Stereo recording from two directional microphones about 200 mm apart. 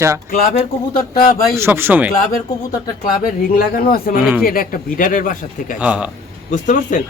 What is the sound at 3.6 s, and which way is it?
Speech, 45° left (ahead or behind).